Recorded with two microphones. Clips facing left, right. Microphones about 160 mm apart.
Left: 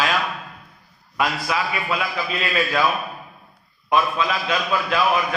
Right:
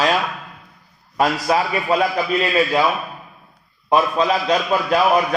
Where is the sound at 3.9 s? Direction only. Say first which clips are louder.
Right 4 dB; 35° right (ahead or behind).